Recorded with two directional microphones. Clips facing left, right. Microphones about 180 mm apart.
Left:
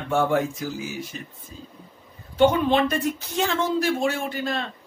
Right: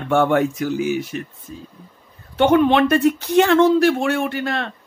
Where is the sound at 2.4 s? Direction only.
65° right (ahead or behind).